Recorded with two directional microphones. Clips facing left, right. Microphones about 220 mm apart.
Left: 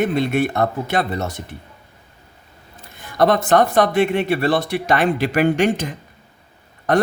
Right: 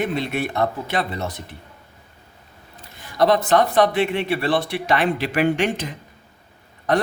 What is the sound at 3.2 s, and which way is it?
Speech, 50° left (ahead or behind).